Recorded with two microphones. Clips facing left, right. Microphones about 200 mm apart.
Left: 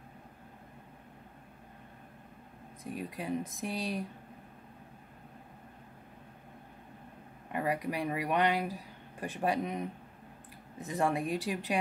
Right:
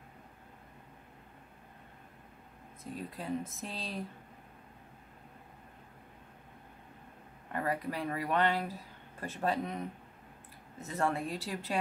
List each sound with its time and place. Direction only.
2.8 s speech: 15° left (ahead or behind)
7.5 s speech: 15° left (ahead or behind)